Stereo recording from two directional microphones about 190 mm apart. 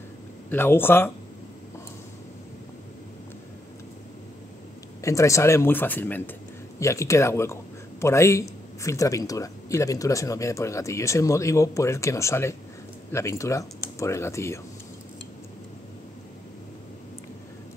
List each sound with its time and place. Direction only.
0.5 s speech: 10° left (ahead or behind)
5.0 s speech: 15° left (ahead or behind)